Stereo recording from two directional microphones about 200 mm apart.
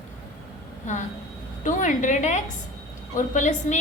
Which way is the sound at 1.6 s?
40° left (ahead or behind).